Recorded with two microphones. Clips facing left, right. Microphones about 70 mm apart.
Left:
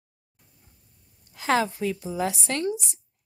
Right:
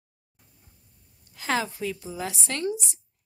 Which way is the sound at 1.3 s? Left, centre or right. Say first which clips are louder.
Left 4 dB; left.